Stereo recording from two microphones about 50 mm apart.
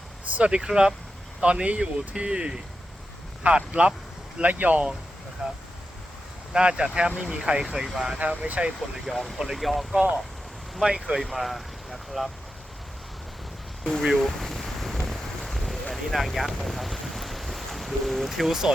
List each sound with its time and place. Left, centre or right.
0.3 s speech: right
0.6 s speech: centre
5.4 s speech: centre
8.1 s speech: right
9.0 s speech: centre
14.1 s a sound: centre